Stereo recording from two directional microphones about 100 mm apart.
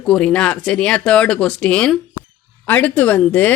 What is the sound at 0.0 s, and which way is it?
Speech, 10° left (ahead or behind).